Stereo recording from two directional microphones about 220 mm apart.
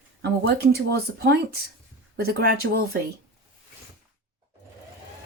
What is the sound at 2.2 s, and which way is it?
Speech, 45° right (ahead or behind).